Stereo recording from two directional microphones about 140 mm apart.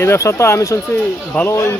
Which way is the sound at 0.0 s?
20° left (ahead or behind).